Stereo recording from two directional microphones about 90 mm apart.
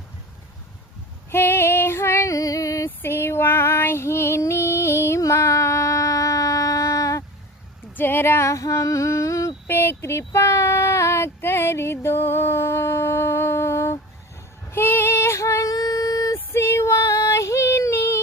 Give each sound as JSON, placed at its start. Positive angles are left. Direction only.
{"t": 1.3, "sound": "female singing", "side_deg": 25}
{"t": 3.0, "sound": "female singing", "side_deg": 25}
{"t": 5.2, "sound": "child singing", "side_deg": 35}
{"t": 7.9, "sound": "female singing", "side_deg": 25}
{"t": 9.6, "sound": "a sound", "side_deg": 25}
{"t": 14.7, "sound": "female singing", "side_deg": 25}
{"t": 16.5, "sound": "female singing", "side_deg": 30}